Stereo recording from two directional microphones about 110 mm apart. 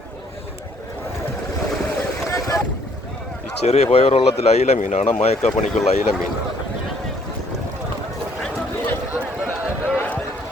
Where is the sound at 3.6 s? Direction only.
75° left (ahead or behind); by 5.1 s 90° left.